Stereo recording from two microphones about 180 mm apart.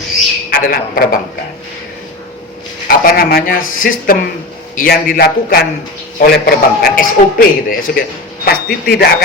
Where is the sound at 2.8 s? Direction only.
55° left (ahead or behind).